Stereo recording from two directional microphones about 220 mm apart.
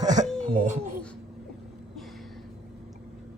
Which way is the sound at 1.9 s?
Centre (ahead or behind).